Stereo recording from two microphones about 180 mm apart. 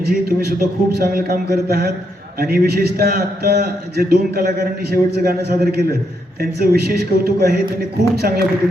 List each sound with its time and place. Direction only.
0.0 s a man's voice: 60° right (ahead or behind)
2.4 s a man's voice: 60° right (ahead or behind)